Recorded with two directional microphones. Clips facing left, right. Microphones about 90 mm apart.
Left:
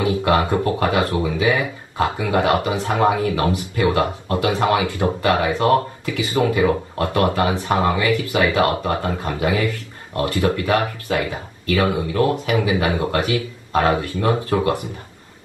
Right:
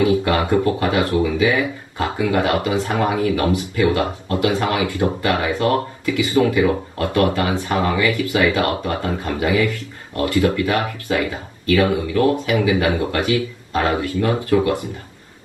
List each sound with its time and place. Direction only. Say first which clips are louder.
0.0 s speech: right 1 dB; 25° left (ahead or behind)